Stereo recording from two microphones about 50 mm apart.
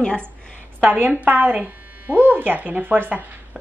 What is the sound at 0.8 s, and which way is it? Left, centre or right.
A woman's voice, right.